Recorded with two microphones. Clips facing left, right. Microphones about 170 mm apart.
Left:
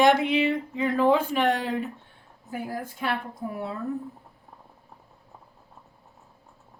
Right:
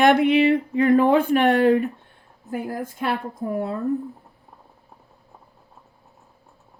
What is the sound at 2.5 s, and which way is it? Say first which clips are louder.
A woman's voice: right 5 dB; 50° right (ahead or behind).